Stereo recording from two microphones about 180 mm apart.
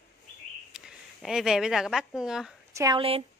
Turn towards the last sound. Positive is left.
turn(degrees=-30)  # may be behind; listen again after turning